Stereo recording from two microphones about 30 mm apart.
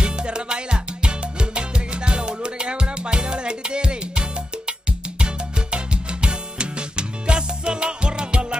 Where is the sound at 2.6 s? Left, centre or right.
Right.